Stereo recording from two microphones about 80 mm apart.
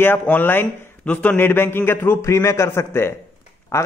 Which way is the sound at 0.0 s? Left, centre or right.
Left.